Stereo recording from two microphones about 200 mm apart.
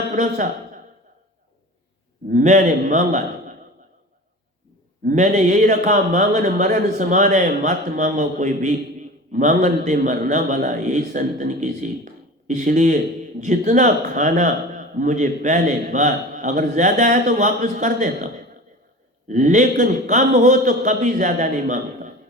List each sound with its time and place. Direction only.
2.2 s a man's voice: 40° right (ahead or behind)
5.0 s a man's voice: 40° right (ahead or behind)
19.3 s a man's voice: 35° right (ahead or behind)